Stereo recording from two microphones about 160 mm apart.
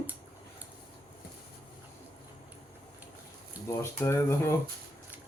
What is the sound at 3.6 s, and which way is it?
Speech, 15° left (ahead or behind).